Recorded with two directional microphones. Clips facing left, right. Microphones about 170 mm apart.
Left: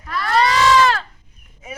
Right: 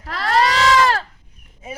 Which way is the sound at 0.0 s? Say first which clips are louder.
Left 2 dB; 90° right.